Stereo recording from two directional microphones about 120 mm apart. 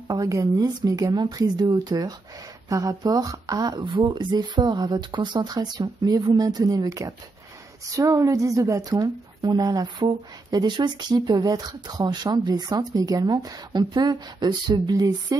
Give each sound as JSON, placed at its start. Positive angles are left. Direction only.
{"t": 0.1, "sound": "a woman's voice", "side_deg": -30}